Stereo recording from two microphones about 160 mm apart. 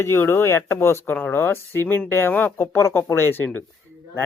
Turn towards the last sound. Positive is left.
turn(degrees=10)  # may be behind; listen again after turning